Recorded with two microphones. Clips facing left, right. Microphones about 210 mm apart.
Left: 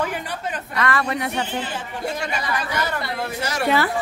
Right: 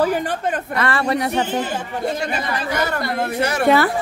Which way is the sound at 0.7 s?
30° right (ahead or behind).